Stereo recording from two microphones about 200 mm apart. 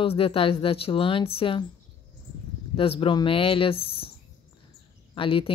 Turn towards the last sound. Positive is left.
turn(degrees=25)  # may be behind; listen again after turning